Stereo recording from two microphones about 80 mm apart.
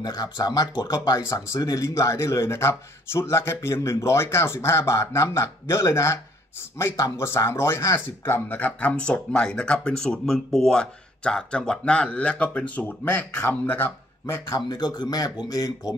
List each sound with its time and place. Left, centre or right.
0.0 s speech: left
1.2 s speech: left
8.5 s speech: left
14.2 s speech: left
14.7 s speech: left